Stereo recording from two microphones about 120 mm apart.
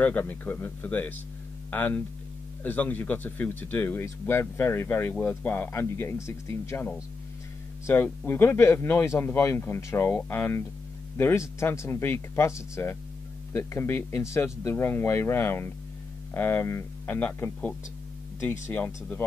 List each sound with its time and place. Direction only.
0.0 s speech: 15° left (ahead or behind)